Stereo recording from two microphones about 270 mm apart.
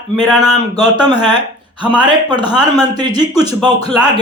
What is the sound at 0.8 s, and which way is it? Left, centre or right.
A man's voice, centre.